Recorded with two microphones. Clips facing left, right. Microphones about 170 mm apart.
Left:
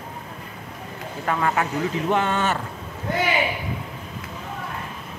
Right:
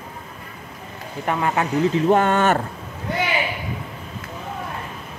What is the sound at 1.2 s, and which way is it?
Speech, 20° right (ahead or behind).